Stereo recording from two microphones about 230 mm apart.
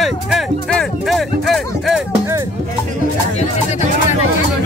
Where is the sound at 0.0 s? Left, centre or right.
Centre.